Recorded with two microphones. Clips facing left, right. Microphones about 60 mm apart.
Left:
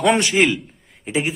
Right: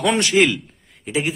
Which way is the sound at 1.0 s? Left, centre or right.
Left.